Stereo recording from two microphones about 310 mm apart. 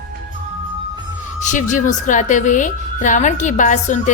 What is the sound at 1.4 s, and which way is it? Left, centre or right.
A woman's voice, left.